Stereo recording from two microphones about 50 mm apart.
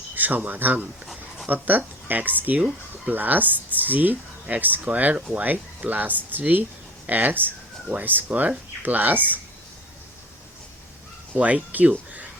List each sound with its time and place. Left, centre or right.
0.2 s speech: right
11.3 s speech: right